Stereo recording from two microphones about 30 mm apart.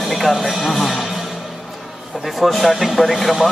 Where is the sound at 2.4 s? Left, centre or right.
Centre.